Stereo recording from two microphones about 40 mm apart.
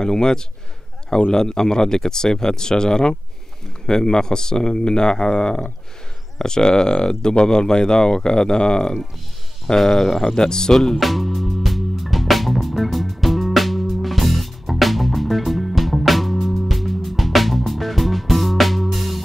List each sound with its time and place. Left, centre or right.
0.0 s speech: centre
9.8 s speech: centre
10.8 s music: centre